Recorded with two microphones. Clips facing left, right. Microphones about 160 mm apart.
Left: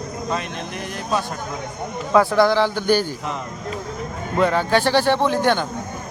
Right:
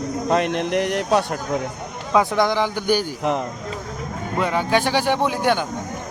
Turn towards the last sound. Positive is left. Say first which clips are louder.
# left 1 dB
turn(degrees=-10)  # may be behind; listen again after turning